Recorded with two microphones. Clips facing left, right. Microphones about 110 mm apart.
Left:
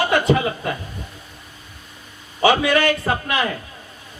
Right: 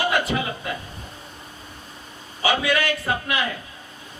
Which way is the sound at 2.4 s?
35° left (ahead or behind).